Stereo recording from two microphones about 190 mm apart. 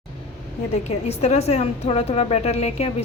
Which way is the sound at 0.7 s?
35° left (ahead or behind).